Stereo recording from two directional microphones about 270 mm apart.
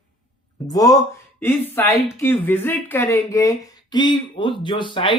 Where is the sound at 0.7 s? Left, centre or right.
Centre.